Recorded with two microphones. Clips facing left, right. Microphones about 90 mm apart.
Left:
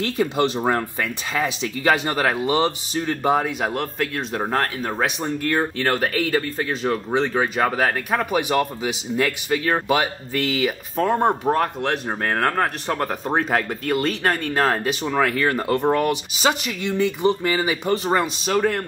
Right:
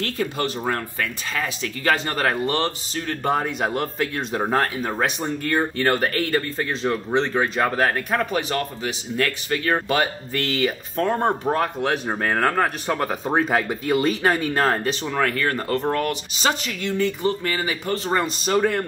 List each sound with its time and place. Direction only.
0.0 s speech: 20° left (ahead or behind)
3.3 s speech: centre (ahead or behind); by 18.1 s 15° left (ahead or behind)
18.1 s speech: centre (ahead or behind)